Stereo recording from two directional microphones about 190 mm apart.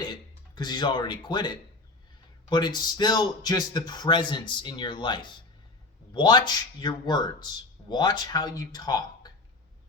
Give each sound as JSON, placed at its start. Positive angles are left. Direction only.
{"t": 0.0, "sound": "speech", "side_deg": 20}